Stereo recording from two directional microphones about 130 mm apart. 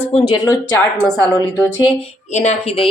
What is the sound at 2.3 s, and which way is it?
Speech, 60° left (ahead or behind).